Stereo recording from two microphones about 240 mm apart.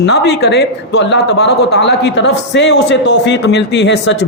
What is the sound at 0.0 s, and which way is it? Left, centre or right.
A man's voice, left.